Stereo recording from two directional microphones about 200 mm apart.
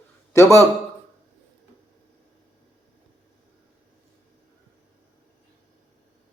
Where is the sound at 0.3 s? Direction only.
15° left (ahead or behind).